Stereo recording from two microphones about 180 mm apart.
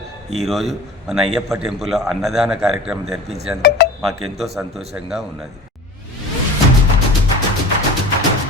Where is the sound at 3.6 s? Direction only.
55° left (ahead or behind).